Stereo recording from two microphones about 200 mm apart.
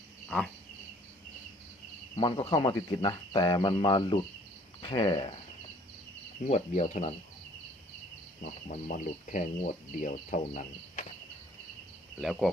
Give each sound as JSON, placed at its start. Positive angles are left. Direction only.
{"t": 0.3, "sound": "frog", "side_deg": 5}
{"t": 2.1, "sound": "speech", "side_deg": 25}
{"t": 6.4, "sound": "speech", "side_deg": 35}
{"t": 8.4, "sound": "speech", "side_deg": 40}
{"t": 12.2, "sound": "speech", "side_deg": 0}